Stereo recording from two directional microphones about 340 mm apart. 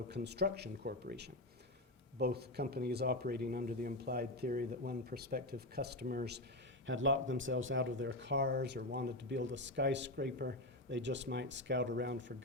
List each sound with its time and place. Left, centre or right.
0.1 s speech: right